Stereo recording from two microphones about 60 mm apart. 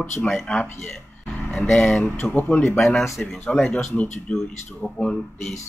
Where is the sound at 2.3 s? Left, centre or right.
Left.